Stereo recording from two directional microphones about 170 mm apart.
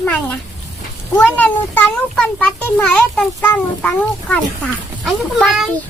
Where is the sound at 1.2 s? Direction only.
10° left (ahead or behind).